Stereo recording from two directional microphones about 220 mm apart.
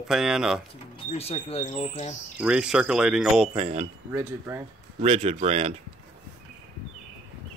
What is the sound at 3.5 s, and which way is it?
Speech, 25° right (ahead or behind).